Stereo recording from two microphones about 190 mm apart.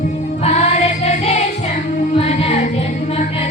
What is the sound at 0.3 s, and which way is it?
Music, 35° left (ahead or behind).